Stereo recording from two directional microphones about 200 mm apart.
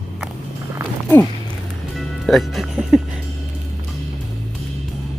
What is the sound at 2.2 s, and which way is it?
Music, centre (ahead or behind).